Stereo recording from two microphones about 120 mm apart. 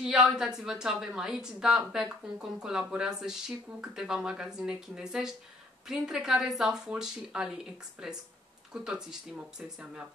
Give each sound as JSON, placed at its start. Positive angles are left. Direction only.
{"t": 0.0, "sound": "a woman's voice", "side_deg": -5}